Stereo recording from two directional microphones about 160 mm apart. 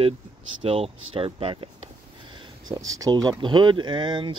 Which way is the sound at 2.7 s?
20° right (ahead or behind).